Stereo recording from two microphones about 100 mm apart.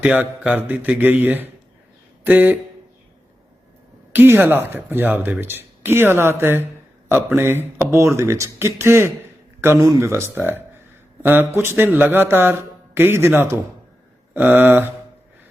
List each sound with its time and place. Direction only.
0.0 s speech: 15° right (ahead or behind)
4.1 s speech: 20° right (ahead or behind)